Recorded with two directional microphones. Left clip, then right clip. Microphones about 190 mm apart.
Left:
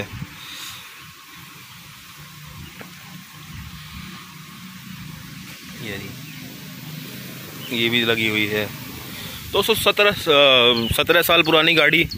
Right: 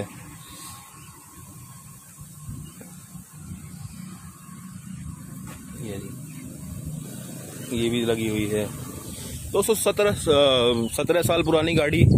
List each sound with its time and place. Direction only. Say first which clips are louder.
7.7 s speech: left 5 dB; 5° right (ahead or behind)